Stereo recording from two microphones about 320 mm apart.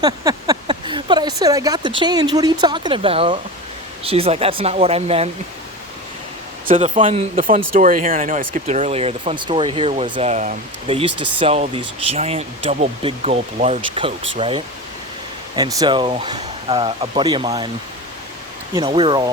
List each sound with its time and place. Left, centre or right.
0.0 s a sound: centre
2.0 s speech: centre
6.7 s speech: centre
11.1 s speech: right
11.3 s speech: centre
18.7 s speech: centre